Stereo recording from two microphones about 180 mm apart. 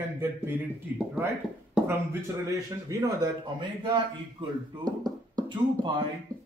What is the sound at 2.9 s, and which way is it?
Speech, 20° right (ahead or behind).